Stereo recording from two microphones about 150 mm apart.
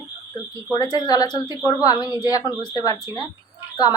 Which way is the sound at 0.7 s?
25° left (ahead or behind).